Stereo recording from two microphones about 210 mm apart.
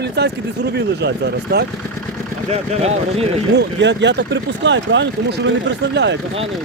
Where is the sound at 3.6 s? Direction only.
55° right (ahead or behind).